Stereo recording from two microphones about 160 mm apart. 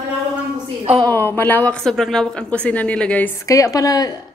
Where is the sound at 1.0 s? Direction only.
10° left (ahead or behind).